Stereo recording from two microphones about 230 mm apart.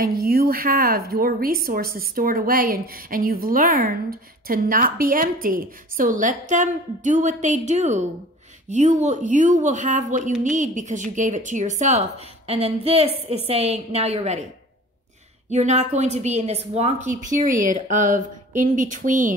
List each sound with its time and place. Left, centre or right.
0.0 s a woman's voice: right
15.5 s a woman's voice: right